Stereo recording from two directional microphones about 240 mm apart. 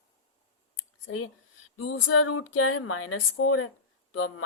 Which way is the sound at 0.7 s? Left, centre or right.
Left.